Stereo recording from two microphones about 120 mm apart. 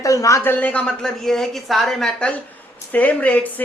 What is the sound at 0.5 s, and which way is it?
A woman's voice, 10° left (ahead or behind).